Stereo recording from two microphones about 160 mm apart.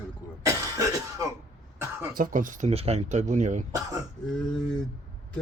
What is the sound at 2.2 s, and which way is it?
Speech, 55° right (ahead or behind).